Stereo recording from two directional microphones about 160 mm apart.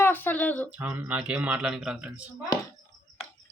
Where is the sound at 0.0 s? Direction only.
10° left (ahead or behind).